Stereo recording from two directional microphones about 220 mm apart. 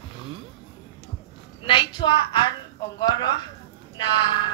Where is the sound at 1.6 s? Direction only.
20° left (ahead or behind).